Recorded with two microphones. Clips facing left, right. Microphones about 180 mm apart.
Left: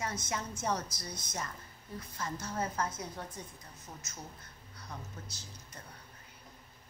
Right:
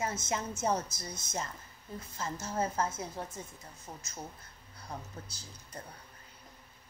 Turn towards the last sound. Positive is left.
turn(degrees=-30)  # may be behind; listen again after turning